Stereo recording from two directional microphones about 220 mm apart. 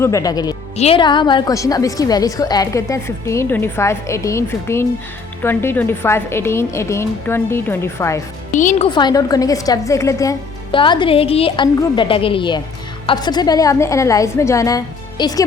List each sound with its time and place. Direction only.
0.0 s a woman's voice: 15° left (ahead or behind)
8.5 s a woman's voice: 35° left (ahead or behind)
8.9 s a woman's voice: 20° left (ahead or behind)